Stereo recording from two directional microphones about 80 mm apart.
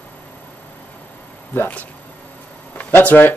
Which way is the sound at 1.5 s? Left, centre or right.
Left.